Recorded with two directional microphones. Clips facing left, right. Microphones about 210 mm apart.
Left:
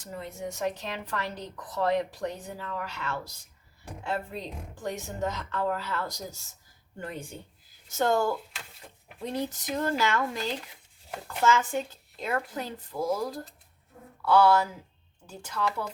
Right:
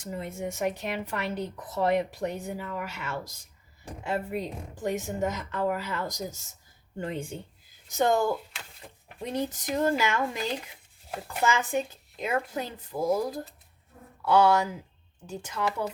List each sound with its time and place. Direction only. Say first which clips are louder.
0.0 s speech: right 3 dB; 20° right (ahead or behind)